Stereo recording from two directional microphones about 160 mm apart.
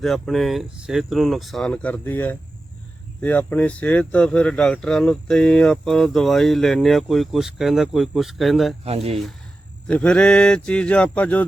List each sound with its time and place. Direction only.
0.0 s speech: centre (ahead or behind)
8.8 s speech: 40° right (ahead or behind)
9.8 s speech: 5° left (ahead or behind)